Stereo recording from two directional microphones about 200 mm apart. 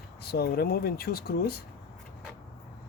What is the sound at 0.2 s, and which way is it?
Speech, 50° left (ahead or behind).